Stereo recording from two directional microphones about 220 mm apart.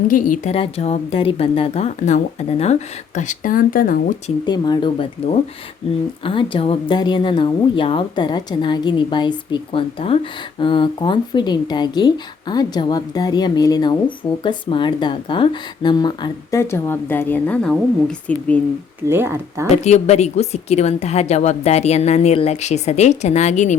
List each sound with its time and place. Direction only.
0.1 s speech: 35° left (ahead or behind)
0.5 s a woman's voice: 25° left (ahead or behind)
4.4 s a woman's voice: 20° left (ahead or behind)
6.2 s a woman's voice: 25° left (ahead or behind); by 18.6 s 5° left (ahead or behind)
19.0 s speech: 10° right (ahead or behind)
19.7 s a woman's voice: 30° left (ahead or behind)